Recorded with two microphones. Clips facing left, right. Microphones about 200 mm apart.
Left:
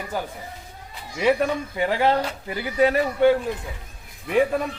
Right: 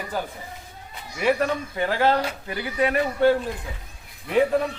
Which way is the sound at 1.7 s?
20° left (ahead or behind).